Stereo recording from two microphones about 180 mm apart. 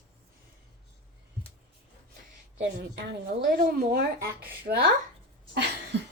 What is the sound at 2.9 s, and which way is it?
Speech, 60° right (ahead or behind).